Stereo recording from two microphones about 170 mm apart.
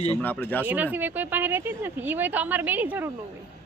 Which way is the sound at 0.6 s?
10° right (ahead or behind).